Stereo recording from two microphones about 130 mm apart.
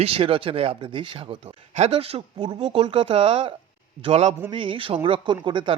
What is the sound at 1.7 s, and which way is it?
Speech, 55° right (ahead or behind).